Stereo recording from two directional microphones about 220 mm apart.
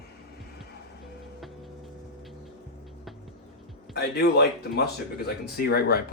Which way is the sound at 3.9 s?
45° left (ahead or behind).